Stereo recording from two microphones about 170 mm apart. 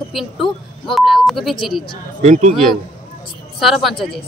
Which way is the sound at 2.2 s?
40° right (ahead or behind).